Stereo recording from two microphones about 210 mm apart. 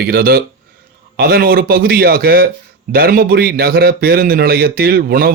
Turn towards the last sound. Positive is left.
turn(degrees=-45)  # may be behind; listen again after turning